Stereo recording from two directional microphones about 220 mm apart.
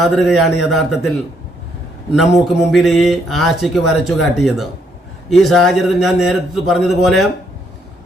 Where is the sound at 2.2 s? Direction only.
Centre (ahead or behind).